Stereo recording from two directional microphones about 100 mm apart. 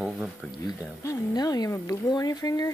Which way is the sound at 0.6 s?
40° left (ahead or behind).